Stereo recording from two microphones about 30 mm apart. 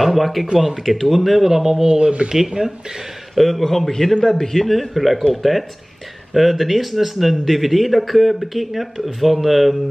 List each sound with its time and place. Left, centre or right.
0.0 s speech: centre
1.9 s speech: right
3.3 s speech: centre
3.6 s a man's voice: centre
3.9 s a man's voice: left
4.6 s speech: centre